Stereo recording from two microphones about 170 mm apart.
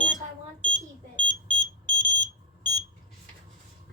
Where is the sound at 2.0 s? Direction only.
50° left (ahead or behind).